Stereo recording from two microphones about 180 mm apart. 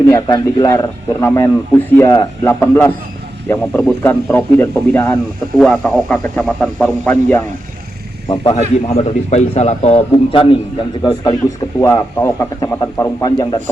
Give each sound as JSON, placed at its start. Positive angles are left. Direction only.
{"t": 0.1, "sound": "speech", "side_deg": 15}
{"t": 8.8, "sound": "a man's voice", "side_deg": 35}